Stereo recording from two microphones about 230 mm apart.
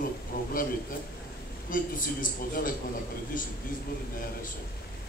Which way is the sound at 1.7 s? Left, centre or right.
Left.